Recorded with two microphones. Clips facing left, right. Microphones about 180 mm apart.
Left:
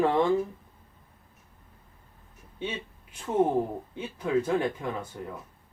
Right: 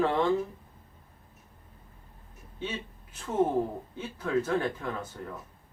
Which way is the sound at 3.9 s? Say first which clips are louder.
Left 3 dB; 15° left (ahead or behind).